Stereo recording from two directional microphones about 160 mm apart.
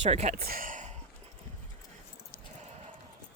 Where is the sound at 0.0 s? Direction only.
40° right (ahead or behind).